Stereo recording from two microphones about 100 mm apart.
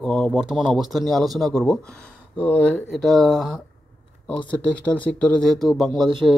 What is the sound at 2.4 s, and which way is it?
Speech, 15° left (ahead or behind).